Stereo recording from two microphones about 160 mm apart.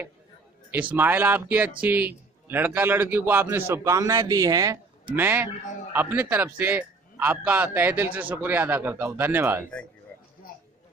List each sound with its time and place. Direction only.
0.9 s a man's voice: 10° right (ahead or behind)
5.1 s a man's voice: 10° right (ahead or behind)
10.1 s a sound: 15° left (ahead or behind)